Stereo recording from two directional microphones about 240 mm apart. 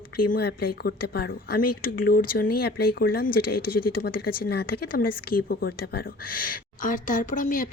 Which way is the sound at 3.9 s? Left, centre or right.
Left.